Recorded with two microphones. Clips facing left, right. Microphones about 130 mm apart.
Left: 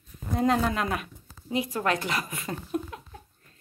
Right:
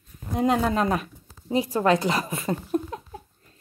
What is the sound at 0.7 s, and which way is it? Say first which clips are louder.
A woman's voice: right 5 dB; 35° right (ahead or behind).